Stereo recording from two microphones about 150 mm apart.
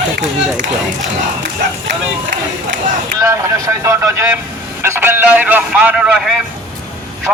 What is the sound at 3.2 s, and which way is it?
A man's voice, 20° right (ahead or behind).